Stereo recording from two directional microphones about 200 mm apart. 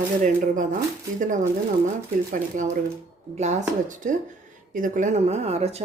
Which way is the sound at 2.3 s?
40° right (ahead or behind).